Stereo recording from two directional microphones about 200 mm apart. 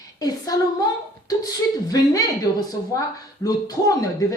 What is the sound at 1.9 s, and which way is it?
Speech, 20° left (ahead or behind).